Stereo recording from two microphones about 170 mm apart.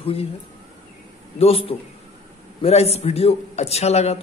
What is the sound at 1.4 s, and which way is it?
A woman's voice, 35° left (ahead or behind).